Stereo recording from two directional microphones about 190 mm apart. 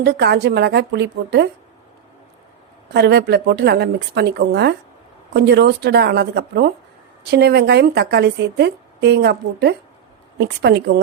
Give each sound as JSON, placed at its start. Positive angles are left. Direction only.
{"t": 0.0, "sound": "a woman's voice", "side_deg": -60}
{"t": 2.9, "sound": "a woman's voice", "side_deg": -60}